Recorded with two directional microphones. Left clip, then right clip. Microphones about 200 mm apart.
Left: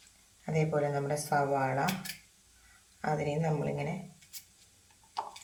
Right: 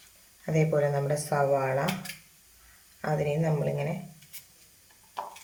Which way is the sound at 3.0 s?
15° right (ahead or behind).